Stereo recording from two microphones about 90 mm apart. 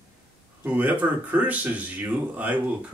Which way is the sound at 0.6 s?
20° right (ahead or behind).